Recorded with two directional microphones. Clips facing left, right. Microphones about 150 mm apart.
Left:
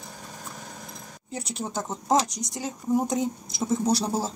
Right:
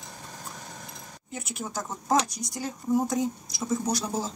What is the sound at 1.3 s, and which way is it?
Speech, 30° left (ahead or behind).